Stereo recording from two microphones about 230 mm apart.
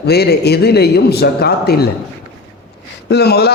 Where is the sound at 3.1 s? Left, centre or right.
Left.